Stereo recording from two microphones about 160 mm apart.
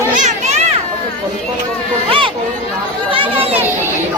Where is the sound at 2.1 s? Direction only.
30° right (ahead or behind).